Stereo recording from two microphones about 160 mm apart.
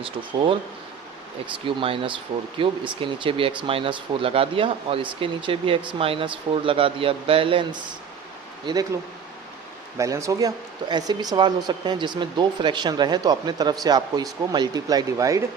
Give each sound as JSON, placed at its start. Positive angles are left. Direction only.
{"t": 0.0, "sound": "speech", "side_deg": -35}
{"t": 1.6, "sound": "speech", "side_deg": -35}
{"t": 10.0, "sound": "speech", "side_deg": -20}